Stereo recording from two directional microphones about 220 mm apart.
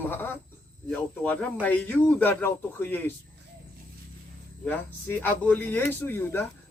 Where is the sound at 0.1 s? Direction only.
10° left (ahead or behind).